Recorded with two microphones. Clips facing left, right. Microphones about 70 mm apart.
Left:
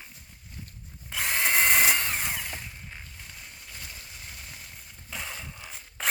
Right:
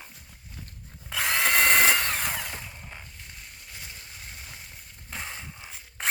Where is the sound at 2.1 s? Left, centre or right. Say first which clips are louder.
Right 2 dB; right.